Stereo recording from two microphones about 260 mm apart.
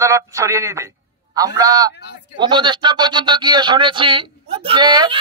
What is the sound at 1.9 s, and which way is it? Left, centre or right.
Speech, left.